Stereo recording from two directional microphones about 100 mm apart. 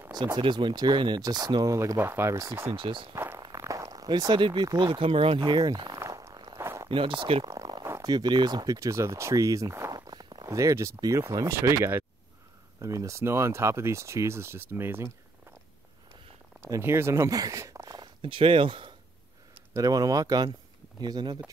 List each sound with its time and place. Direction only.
0.1 s speech: 45° right (ahead or behind); by 2.7 s 30° right (ahead or behind)
2.7 s speech: 55° right (ahead or behind)
3.3 s zipper: 35° right (ahead or behind)
4.3 s speech: 50° right (ahead or behind); by 5.4 s 65° right (ahead or behind)
5.4 s speech: 45° right (ahead or behind)
5.9 s a sound: 30° right (ahead or behind)
6.6 s a sound: 30° right (ahead or behind)
6.9 s speech: 60° right (ahead or behind)
7.4 s a sound: 35° right (ahead or behind)
8.1 s speech: 45° right (ahead or behind); by 15.0 s 25° right (ahead or behind)
16.6 s speech: 30° right (ahead or behind); by 18.9 s 60° right (ahead or behind)
19.7 s speech: 35° right (ahead or behind)